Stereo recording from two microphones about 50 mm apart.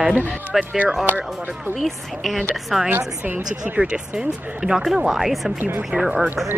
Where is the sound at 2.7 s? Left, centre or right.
Centre.